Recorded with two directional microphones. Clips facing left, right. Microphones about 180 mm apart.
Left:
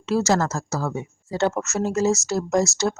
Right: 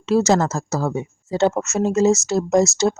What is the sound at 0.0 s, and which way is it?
A woman's voice, 20° right (ahead or behind).